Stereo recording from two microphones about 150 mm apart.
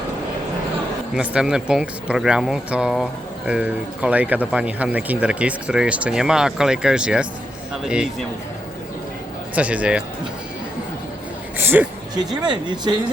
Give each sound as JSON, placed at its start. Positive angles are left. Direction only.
{"t": 1.1, "sound": "a man's voice", "side_deg": -5}
{"t": 9.6, "sound": "speech", "side_deg": -10}
{"t": 11.5, "sound": "a sound", "side_deg": -15}
{"t": 12.5, "sound": "speech", "side_deg": -30}